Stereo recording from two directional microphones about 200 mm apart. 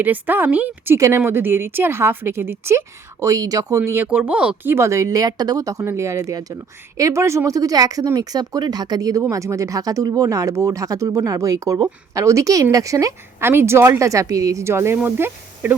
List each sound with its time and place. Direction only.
0.0 s speech: 10° right (ahead or behind)